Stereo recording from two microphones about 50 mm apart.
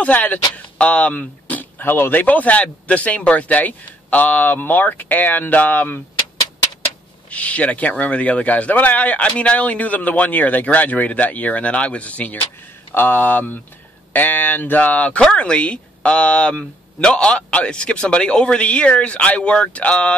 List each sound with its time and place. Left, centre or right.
0.0 s speech: left
2.2 s speech: left
7.2 s speech: left
12.9 s speech: left